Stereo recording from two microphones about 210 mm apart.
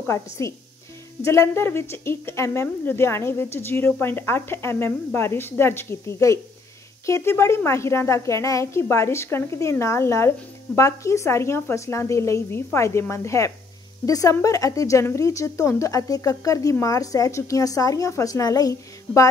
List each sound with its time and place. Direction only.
0.0 s a woman's voice: 15° left (ahead or behind)